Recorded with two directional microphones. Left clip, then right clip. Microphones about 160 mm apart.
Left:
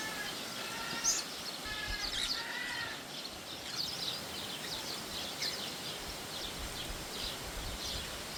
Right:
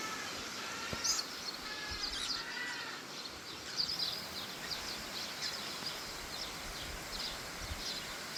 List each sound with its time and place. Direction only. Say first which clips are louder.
1.0 s bird: left 1 dB; 5° left (ahead or behind)